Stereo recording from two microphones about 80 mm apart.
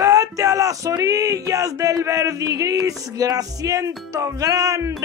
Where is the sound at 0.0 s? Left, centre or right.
Right.